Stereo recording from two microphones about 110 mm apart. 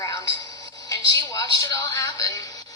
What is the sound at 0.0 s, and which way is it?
Music, 30° left (ahead or behind).